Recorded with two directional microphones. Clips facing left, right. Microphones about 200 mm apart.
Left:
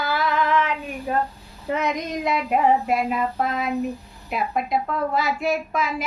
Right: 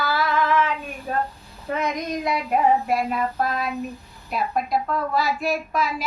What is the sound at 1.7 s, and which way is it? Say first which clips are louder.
Speech: left 1 dB; 20° left (ahead or behind).